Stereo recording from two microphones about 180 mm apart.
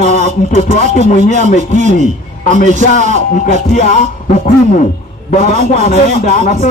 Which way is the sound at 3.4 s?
45° left (ahead or behind).